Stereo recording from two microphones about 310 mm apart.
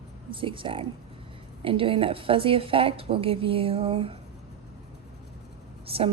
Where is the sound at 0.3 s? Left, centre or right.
Centre.